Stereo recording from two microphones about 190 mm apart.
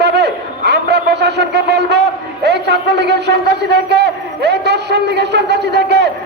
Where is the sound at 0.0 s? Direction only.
60° right (ahead or behind).